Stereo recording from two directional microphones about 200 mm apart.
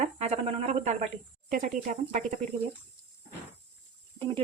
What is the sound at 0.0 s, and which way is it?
Speech, 35° right (ahead or behind).